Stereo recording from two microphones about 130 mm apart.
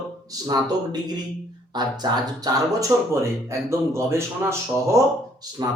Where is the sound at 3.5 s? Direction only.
20° right (ahead or behind).